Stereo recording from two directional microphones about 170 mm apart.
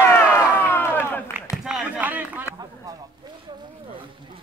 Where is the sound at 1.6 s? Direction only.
5° right (ahead or behind).